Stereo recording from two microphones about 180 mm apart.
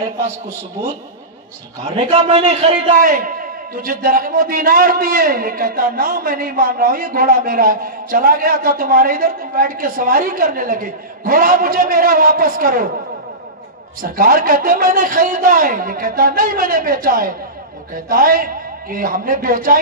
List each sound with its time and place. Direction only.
2.0 s a man's voice: 35° right (ahead or behind)
3.0 s a man's voice: 50° right (ahead or behind)
14.0 s a man's voice: 50° right (ahead or behind)